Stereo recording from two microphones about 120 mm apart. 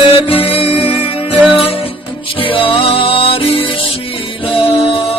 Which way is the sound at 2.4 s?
45° left (ahead or behind).